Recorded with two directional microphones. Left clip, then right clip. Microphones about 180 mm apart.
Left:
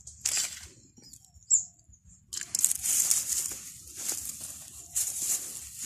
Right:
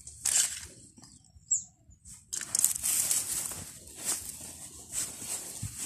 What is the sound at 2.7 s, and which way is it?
Crumpling, 30° right (ahead or behind).